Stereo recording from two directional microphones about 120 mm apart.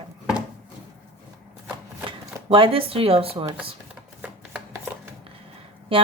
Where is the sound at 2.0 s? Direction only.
45° right (ahead or behind).